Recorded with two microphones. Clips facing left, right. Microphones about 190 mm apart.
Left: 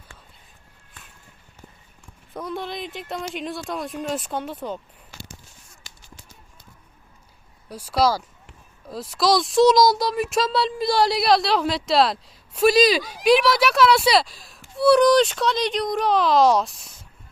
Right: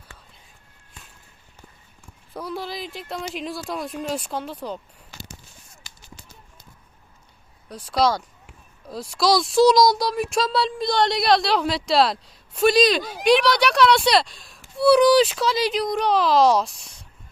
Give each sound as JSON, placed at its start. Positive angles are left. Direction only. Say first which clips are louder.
{"t": 2.3, "sound": "speech", "louder": "left 1 dB", "side_deg": 0}
{"t": 7.7, "sound": "speech", "louder": "even", "side_deg": 5}